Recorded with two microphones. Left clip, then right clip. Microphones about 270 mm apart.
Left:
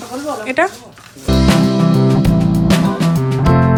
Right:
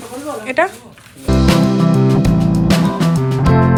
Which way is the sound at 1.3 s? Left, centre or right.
Centre.